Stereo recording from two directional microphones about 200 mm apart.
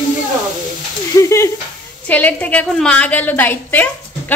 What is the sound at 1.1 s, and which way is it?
Speech, 15° left (ahead or behind).